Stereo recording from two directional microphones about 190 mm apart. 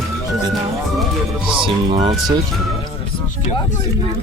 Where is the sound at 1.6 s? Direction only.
30° right (ahead or behind).